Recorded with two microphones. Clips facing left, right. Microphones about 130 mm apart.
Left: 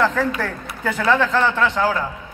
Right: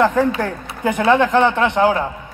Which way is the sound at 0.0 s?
15° right (ahead or behind).